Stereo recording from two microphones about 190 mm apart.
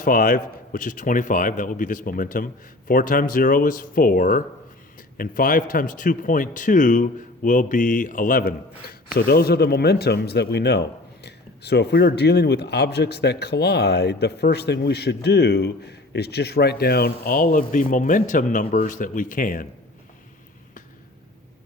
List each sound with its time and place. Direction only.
0.0 s a man's voice: 45° left (ahead or behind)